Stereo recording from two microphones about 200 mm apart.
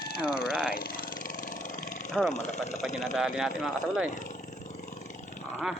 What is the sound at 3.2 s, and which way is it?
Speech, centre (ahead or behind).